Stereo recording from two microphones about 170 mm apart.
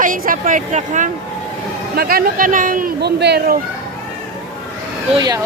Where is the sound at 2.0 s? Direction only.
60° right (ahead or behind).